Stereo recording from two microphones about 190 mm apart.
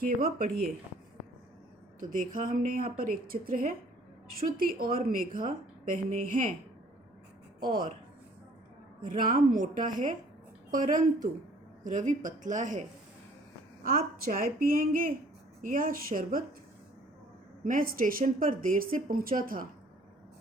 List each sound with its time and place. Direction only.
0.0 s a woman's voice: 50° right (ahead or behind)
2.0 s a woman's voice: 45° right (ahead or behind)
7.7 s a woman's voice: 50° right (ahead or behind)
9.0 s a woman's voice: 45° right (ahead or behind)
13.8 s a woman's voice: 50° right (ahead or behind)
17.6 s a woman's voice: 50° right (ahead or behind)